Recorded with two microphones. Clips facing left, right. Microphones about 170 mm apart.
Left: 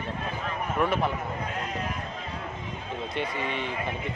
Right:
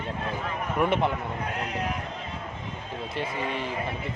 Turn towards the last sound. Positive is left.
turn(degrees=-5)  # may be behind; listen again after turning